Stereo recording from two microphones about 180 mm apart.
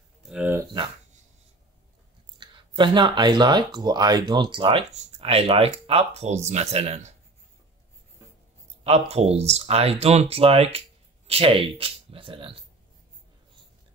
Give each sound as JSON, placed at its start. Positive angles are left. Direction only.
{"t": 0.2, "sound": "a sound", "side_deg": -5}
{"t": 2.3, "sound": "speech", "side_deg": -25}
{"t": 9.1, "sound": "speech", "side_deg": -35}